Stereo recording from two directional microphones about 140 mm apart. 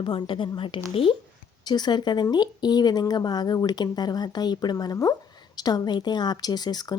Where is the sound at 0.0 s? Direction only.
35° left (ahead or behind).